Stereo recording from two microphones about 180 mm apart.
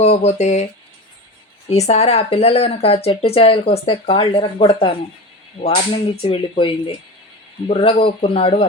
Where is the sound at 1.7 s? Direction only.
35° left (ahead or behind).